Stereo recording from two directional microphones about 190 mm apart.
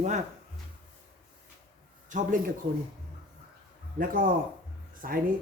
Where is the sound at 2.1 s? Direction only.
40° right (ahead or behind).